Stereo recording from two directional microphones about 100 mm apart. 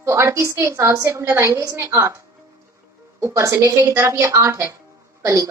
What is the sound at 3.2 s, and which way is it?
A woman's voice, 30° right (ahead or behind).